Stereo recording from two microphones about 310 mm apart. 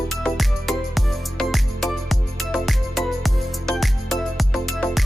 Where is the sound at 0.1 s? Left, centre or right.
Centre.